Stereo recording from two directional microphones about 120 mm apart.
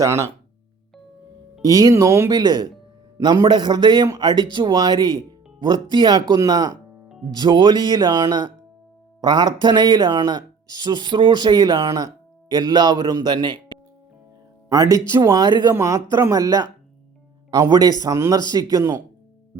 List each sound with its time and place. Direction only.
0.0 s speech: 25° right (ahead or behind)
1.6 s speech: 30° right (ahead or behind)
2.3 s speech: 35° right (ahead or behind)
14.7 s speech: 30° right (ahead or behind)
15.7 s speech: 20° right (ahead or behind)